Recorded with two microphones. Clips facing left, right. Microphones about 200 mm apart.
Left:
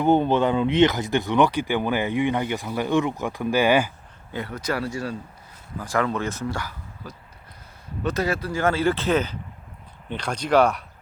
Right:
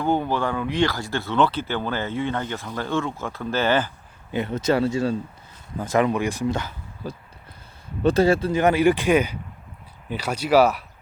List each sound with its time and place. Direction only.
0.0 s speech: 20° left (ahead or behind)
4.3 s speech: 20° right (ahead or behind); by 10.8 s 5° right (ahead or behind)